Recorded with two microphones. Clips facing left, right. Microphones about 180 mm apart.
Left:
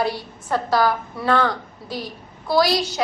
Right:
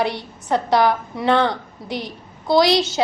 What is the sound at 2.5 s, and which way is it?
Speech, 20° right (ahead or behind).